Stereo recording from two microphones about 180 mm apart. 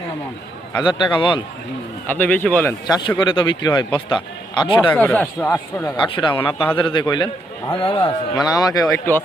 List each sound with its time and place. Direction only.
0.8 s a man's voice: 25° left (ahead or behind)
2.0 s speech: 10° left (ahead or behind)
3.2 s a man's voice: 25° left (ahead or behind)
4.8 s speech: 10° left (ahead or behind)
6.0 s a man's voice: 25° left (ahead or behind)